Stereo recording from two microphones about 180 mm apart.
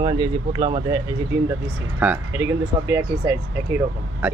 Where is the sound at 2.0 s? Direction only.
10° right (ahead or behind).